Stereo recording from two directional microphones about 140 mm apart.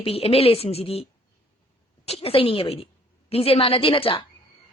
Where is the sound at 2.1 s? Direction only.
45° left (ahead or behind).